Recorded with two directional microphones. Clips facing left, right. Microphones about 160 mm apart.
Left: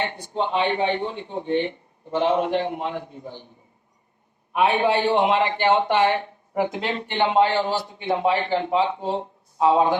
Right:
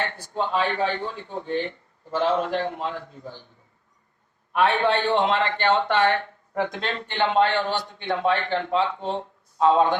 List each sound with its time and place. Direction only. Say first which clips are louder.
0.0 s speech: left 2 dB; 20° left (ahead or behind)
4.6 s speech: left 2 dB; 20° left (ahead or behind)